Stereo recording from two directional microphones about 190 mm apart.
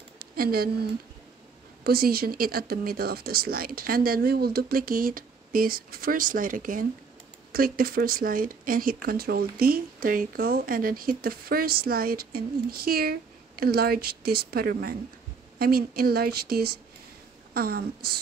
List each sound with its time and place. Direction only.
0.2 s speech: 50° right (ahead or behind)
1.9 s speech: 55° right (ahead or behind)